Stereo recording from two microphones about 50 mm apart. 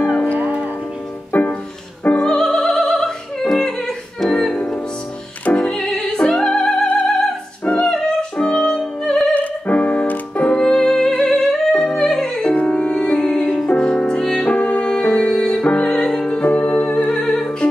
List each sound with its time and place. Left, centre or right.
0.0 s music: left
0.4 s music: right
1.3 s music: left
2.1 s opera: centre
5.6 s music: centre
9.3 s music: left; by 14.4 s centre
14.4 s music: left